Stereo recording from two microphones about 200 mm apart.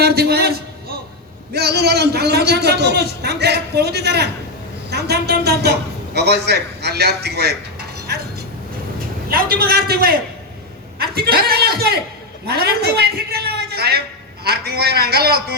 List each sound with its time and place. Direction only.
0.0 s a sound: 50° right (ahead or behind)
1.5 s a man's voice: 55° right (ahead or behind)
9.3 s a man's voice: 50° right (ahead or behind)